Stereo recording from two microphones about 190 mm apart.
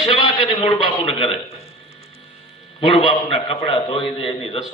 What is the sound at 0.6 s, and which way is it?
Speech, 30° left (ahead or behind).